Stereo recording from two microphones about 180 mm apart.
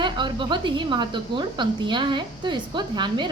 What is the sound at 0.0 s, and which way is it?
A woman's voice, 25° right (ahead or behind).